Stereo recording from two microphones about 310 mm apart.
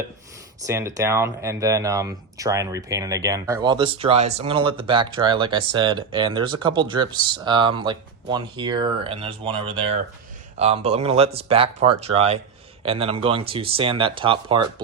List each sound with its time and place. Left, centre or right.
0.7 s speech: centre